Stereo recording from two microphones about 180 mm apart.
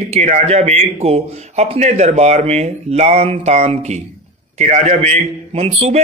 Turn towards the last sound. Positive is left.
turn(degrees=-35)  # may be behind; listen again after turning